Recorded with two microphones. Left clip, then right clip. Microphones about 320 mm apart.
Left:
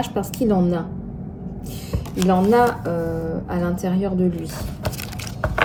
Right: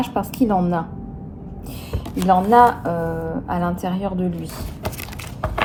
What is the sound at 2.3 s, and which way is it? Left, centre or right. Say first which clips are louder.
A woman's voice: right 4 dB; centre.